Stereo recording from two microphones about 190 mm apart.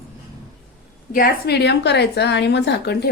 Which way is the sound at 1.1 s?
55° left (ahead or behind).